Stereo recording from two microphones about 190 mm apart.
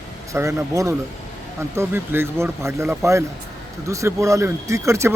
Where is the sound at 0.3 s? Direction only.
15° right (ahead or behind).